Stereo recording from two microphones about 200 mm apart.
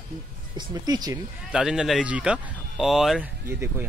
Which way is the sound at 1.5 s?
5° right (ahead or behind).